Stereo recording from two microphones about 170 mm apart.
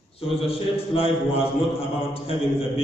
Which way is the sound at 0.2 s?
35° left (ahead or behind).